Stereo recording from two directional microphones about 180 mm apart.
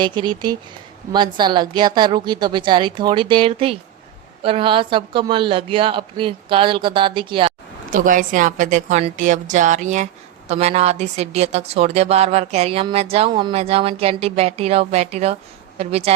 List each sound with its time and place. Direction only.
0.0 s a woman's voice: 25° right (ahead or behind)
7.9 s a woman's voice: 45° right (ahead or behind)